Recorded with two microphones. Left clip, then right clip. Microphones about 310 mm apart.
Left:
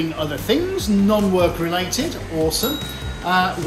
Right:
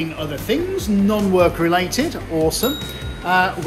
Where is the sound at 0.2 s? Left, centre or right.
Centre.